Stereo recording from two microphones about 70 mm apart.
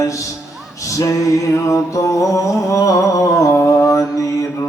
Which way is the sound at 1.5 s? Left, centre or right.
Left.